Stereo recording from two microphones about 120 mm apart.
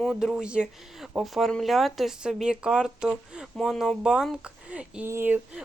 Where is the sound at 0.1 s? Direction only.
5° right (ahead or behind).